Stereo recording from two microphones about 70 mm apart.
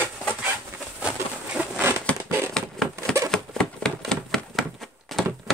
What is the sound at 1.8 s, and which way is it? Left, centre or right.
Crumpling, right.